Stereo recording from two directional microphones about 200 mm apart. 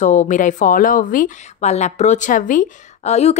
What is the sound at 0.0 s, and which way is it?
Speech, 35° left (ahead or behind).